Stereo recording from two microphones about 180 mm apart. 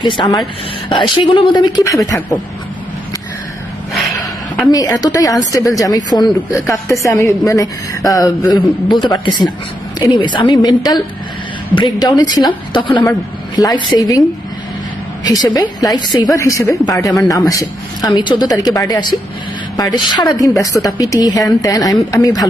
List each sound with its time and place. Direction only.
0.0 s speech: 25° left (ahead or behind)
4.7 s a woman's voice: 20° left (ahead or behind)